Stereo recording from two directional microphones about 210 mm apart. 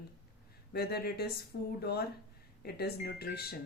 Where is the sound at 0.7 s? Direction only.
50° left (ahead or behind).